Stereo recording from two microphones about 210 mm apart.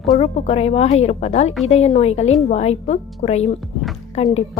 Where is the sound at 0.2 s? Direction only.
30° left (ahead or behind).